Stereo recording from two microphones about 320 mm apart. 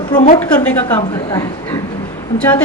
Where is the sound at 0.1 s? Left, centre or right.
Left.